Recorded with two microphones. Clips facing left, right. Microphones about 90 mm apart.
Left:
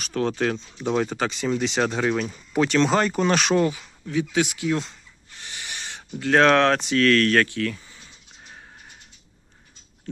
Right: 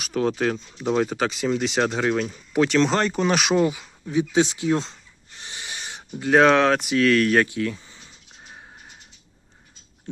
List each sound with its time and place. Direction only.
0.0 s speech: 5° right (ahead or behind); by 4.9 s 25° right (ahead or behind)
5.4 s a sound: 20° right (ahead or behind)
6.4 s speech: centre (ahead or behind); by 7.8 s 20° right (ahead or behind)